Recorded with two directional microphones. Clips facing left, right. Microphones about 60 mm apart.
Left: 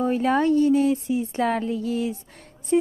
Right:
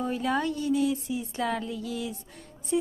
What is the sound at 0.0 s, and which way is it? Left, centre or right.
Speech, left.